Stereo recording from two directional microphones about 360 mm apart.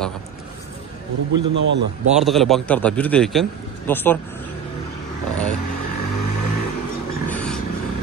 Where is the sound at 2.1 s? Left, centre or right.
Centre.